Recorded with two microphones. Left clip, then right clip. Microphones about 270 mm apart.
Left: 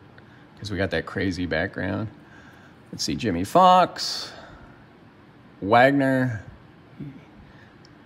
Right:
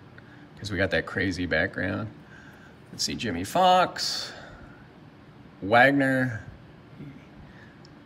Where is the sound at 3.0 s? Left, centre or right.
Left.